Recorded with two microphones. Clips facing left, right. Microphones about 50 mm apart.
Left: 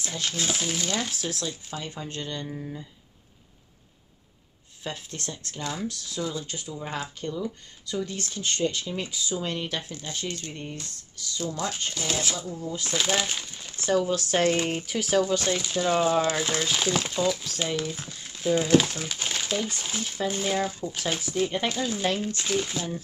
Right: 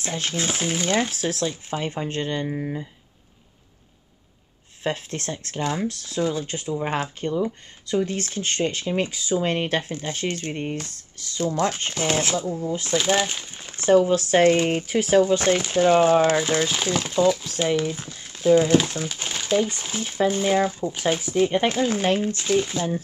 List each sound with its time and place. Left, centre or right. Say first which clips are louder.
0.0 s speech: right 4 dB; right
1.1 s speech: right 7 dB; right
4.8 s speech: right 8 dB; right
5.7 s speech: right 5 dB; right
5.9 s speech: right 7 dB; right
12.9 s speech: right 5 dB; centre
13.7 s a sound: right 8 dB; right
13.9 s speech: right 7 dB; right
16.3 s speech: right 5 dB; centre
18.2 s crumpling: right 8 dB; centre
18.6 s speech: right 3 dB; centre; by 21.7 s right
21.7 s speech: right 6 dB; right
22.1 s speech: right 6 dB; right
22.4 s speech: right 6 dB; centre